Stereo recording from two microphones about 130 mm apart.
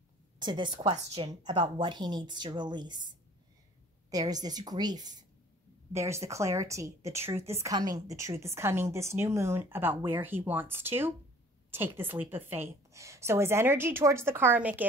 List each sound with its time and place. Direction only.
0.4 s speech: 35° right (ahead or behind)
0.7 s a woman's voice: 45° right (ahead or behind)
4.1 s speech: 30° right (ahead or behind)
5.9 s a woman's voice: 20° right (ahead or behind)
7.7 s a woman's voice: 30° right (ahead or behind); by 14.9 s 10° right (ahead or behind)